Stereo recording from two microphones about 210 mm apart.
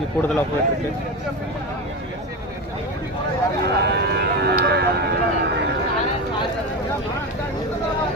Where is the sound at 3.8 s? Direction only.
50° right (ahead or behind).